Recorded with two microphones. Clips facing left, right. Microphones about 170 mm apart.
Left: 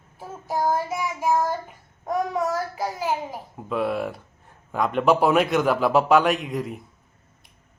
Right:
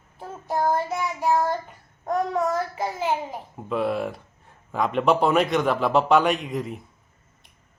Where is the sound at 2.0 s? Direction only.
5° left (ahead or behind).